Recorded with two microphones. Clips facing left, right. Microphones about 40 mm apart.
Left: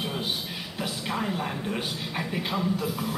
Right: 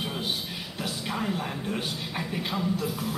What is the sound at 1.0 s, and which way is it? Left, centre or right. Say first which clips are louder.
A man's voice: left 1 dB; centre.